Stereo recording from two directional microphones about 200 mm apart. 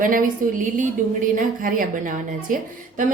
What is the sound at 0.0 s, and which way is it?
A woman's voice, 40° right (ahead or behind).